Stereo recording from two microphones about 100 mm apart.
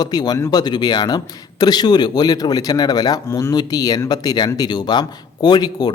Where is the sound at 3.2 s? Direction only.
25° left (ahead or behind).